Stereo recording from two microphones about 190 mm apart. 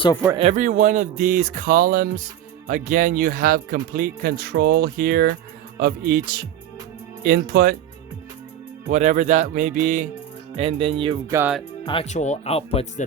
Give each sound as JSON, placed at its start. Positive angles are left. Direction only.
{"t": 0.3, "sound": "speech", "side_deg": -35}
{"t": 8.9, "sound": "speech", "side_deg": -40}
{"t": 10.5, "sound": "speech", "side_deg": -30}
{"t": 11.3, "sound": "speech", "side_deg": -15}
{"t": 11.9, "sound": "speech", "side_deg": 35}